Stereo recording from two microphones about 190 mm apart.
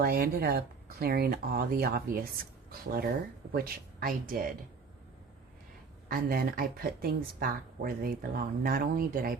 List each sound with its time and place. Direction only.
0.0 s speech: 55° right (ahead or behind)
6.1 s speech: 50° right (ahead or behind)